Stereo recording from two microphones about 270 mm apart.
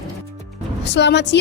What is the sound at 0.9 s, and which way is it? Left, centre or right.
Speech, left.